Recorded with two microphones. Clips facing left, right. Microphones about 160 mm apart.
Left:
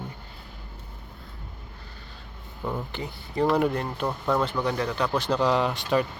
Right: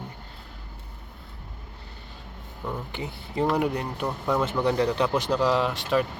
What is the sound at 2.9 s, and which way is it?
Speech, 20° right (ahead or behind).